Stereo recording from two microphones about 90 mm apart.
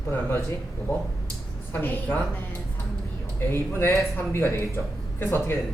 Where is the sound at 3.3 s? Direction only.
30° left (ahead or behind).